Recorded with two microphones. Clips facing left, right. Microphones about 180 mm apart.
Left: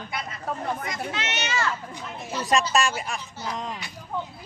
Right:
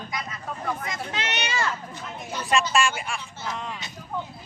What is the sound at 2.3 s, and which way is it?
Speech, 35° left (ahead or behind).